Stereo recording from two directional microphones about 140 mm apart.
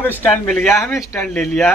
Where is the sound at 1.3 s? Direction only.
5° left (ahead or behind).